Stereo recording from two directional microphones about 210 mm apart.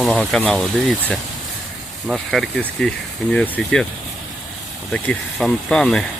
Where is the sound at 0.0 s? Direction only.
5° left (ahead or behind).